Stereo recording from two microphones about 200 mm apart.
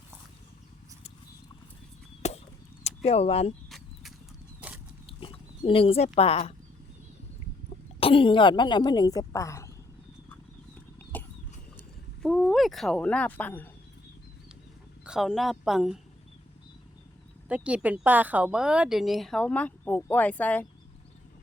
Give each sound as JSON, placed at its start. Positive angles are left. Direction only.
{"t": 2.8, "sound": "speech", "side_deg": 30}
{"t": 3.7, "sound": "a sound", "side_deg": 0}
{"t": 5.0, "sound": "a sound", "side_deg": 25}
{"t": 7.9, "sound": "speech", "side_deg": 25}
{"t": 12.2, "sound": "speech", "side_deg": 0}
{"t": 15.0, "sound": "a woman's voice", "side_deg": -5}
{"t": 17.5, "sound": "a woman's voice", "side_deg": -5}